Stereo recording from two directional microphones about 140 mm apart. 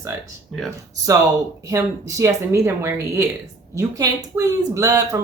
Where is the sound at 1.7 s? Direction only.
25° right (ahead or behind).